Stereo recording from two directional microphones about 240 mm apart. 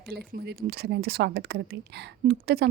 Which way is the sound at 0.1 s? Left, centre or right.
Right.